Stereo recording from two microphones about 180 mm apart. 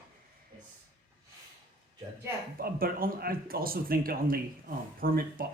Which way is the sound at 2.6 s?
55° right (ahead or behind).